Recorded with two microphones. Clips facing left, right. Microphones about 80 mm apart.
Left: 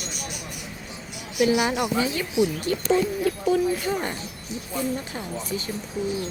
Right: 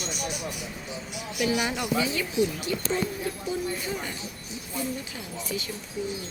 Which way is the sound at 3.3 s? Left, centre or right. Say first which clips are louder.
Left 8 dB; left.